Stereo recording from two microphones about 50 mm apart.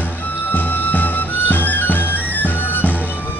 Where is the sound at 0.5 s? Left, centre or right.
Left.